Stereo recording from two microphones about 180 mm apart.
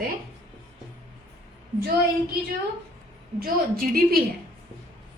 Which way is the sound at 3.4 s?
55° right (ahead or behind).